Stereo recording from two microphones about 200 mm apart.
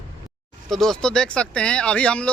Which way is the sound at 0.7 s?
Centre (ahead or behind).